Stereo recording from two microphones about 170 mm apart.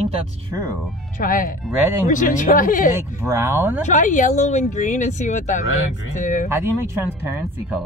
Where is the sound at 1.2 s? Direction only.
55° left (ahead or behind).